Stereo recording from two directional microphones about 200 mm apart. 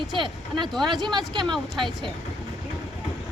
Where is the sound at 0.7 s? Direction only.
Centre (ahead or behind).